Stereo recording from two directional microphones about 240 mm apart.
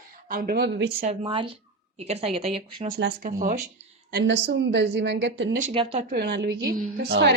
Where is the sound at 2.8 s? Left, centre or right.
Right.